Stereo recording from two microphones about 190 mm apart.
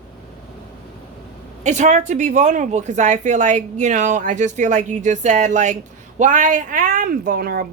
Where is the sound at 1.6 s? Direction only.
40° right (ahead or behind).